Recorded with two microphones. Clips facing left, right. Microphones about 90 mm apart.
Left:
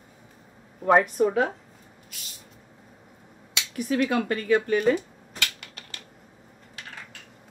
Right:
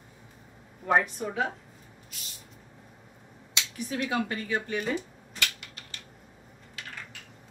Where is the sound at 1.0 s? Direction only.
60° left (ahead or behind).